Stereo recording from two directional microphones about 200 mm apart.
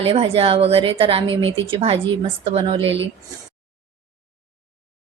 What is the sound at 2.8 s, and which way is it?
Speech, 65° right (ahead or behind).